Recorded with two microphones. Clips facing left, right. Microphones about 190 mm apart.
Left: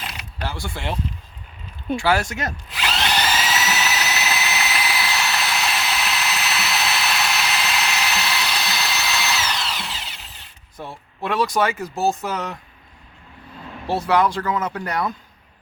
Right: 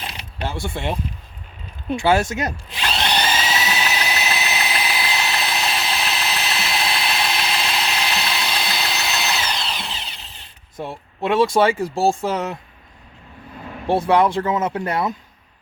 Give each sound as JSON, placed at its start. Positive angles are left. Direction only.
{"t": 0.0, "sound": "mechanisms", "side_deg": -25}
{"t": 2.0, "sound": "drill", "side_deg": -25}
{"t": 4.1, "sound": "engine", "side_deg": -15}
{"t": 4.4, "sound": "engine", "side_deg": -30}
{"t": 5.4, "sound": "ratchet", "side_deg": -30}
{"t": 8.2, "sound": "drill", "side_deg": -25}
{"t": 10.8, "sound": "speech", "side_deg": -25}
{"t": 13.8, "sound": "speech", "side_deg": -25}